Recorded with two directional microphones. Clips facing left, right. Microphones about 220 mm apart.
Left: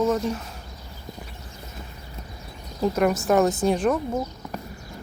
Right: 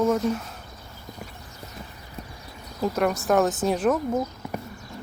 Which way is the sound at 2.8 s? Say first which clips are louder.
Left 2 dB; centre (ahead or behind).